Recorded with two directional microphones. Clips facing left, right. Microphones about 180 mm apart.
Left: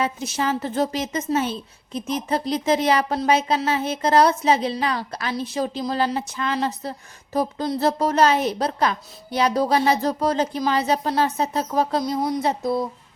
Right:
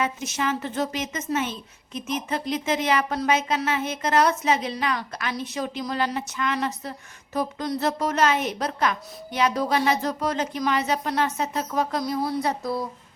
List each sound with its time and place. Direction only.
0.0 s a woman's voice: 35° left (ahead or behind)